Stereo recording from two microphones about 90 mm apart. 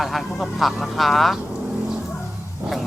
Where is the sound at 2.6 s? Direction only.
20° right (ahead or behind).